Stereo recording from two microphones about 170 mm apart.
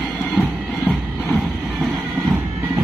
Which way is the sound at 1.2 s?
10° left (ahead or behind).